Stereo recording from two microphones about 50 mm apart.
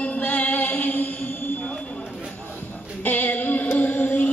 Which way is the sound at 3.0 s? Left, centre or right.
Left.